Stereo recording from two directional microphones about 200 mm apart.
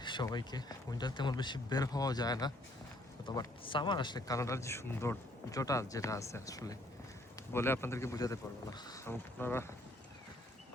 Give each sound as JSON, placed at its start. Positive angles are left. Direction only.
{"t": 0.0, "sound": "speech", "side_deg": 20}